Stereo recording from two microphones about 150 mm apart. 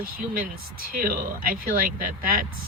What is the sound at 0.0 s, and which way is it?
Speech, 70° right (ahead or behind).